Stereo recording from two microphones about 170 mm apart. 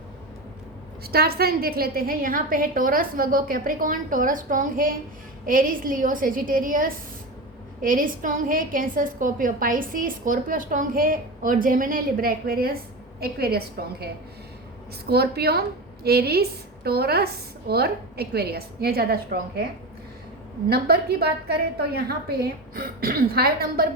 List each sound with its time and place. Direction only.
1.0 s a woman's voice: 65° right (ahead or behind)
20.7 s a woman's voice: 65° right (ahead or behind)